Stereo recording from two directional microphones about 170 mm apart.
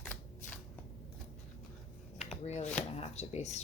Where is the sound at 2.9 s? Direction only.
40° left (ahead or behind).